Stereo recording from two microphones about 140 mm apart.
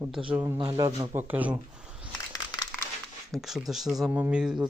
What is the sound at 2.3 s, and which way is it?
Crumpling, 25° left (ahead or behind).